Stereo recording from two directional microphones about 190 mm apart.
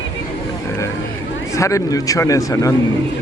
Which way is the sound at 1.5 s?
15° left (ahead or behind).